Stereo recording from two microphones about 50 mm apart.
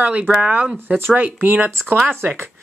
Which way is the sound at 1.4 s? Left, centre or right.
Right.